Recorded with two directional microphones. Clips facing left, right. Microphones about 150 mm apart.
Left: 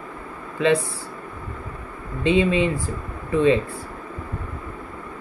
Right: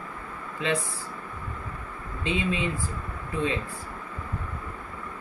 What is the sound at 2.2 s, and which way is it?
Speech, 70° left (ahead or behind).